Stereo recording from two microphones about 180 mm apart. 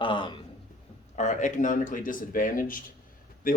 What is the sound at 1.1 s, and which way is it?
Speech, 45° left (ahead or behind).